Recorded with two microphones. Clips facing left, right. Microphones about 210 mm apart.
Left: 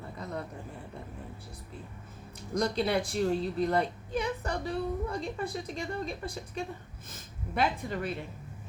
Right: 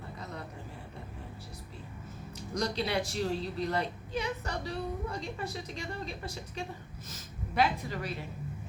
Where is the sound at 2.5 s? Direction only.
55° left (ahead or behind).